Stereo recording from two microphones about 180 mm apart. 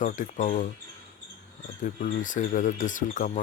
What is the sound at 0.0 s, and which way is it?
Speech, 45° left (ahead or behind).